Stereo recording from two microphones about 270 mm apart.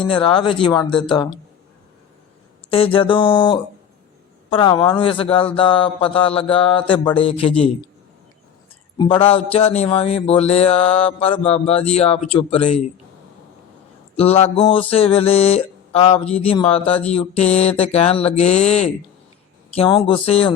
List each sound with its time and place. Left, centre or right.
0.1 s speech: centre
2.6 s speech: centre
9.0 s speech: centre
14.2 s speech: left